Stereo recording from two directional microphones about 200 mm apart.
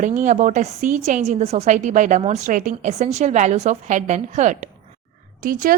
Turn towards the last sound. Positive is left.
turn(degrees=-45)  # may be behind; listen again after turning